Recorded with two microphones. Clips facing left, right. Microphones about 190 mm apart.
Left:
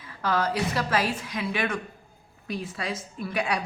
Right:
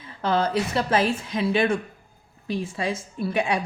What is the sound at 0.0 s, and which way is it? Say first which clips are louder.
A woman's voice: right 3 dB; 25° right (ahead or behind).